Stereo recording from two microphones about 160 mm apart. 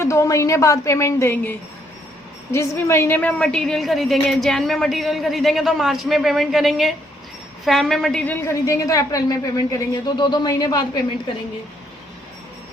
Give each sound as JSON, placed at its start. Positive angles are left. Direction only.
{"t": 0.0, "sound": "a woman's voice", "side_deg": 15}